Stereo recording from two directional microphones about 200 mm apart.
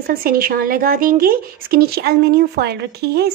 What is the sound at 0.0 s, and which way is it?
A woman's voice, 50° right (ahead or behind).